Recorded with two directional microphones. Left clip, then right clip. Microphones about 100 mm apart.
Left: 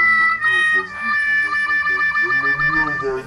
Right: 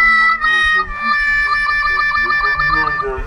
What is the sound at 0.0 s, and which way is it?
Music, 40° right (ahead or behind).